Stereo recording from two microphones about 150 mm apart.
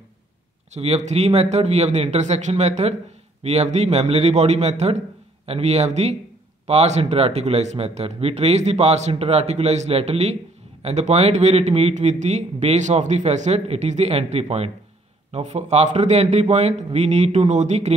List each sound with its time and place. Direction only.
0.7 s a man's voice: 45° right (ahead or behind)